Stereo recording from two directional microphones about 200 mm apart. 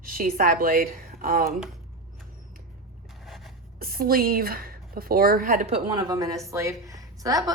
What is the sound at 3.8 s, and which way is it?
A woman's voice, 45° right (ahead or behind).